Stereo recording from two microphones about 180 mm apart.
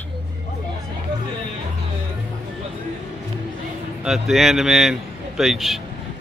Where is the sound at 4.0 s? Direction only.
Centre (ahead or behind).